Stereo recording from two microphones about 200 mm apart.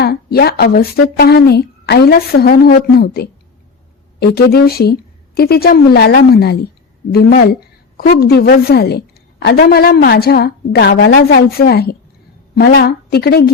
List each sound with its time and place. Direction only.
0.0 s speech: 50° left (ahead or behind)